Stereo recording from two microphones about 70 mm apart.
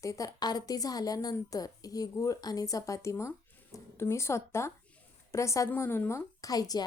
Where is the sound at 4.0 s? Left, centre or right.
Left.